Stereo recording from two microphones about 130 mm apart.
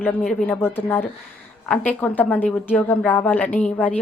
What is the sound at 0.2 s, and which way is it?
Speech, centre (ahead or behind).